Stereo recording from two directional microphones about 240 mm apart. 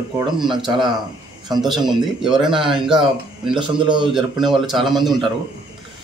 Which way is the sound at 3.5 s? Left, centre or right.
Centre.